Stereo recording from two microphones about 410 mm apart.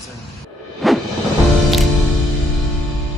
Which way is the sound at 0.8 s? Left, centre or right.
Centre.